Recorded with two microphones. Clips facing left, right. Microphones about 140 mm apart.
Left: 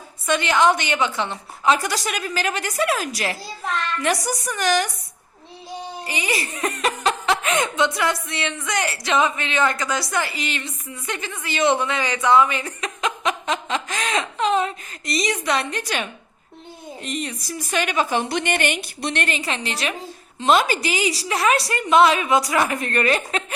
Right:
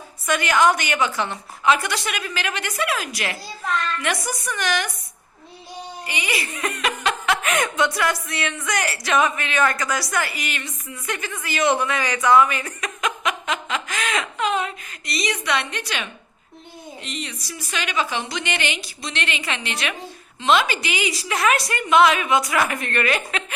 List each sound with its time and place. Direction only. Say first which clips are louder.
0.3 s speech: even; 25° left (ahead or behind)
1.6 s a woman's voice: even; 35° left (ahead or behind)
6.1 s a woman's voice: left 2 dB; 35° left (ahead or behind)